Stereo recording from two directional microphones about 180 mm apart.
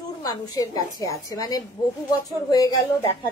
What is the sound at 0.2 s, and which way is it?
A woman's voice, 20° left (ahead or behind).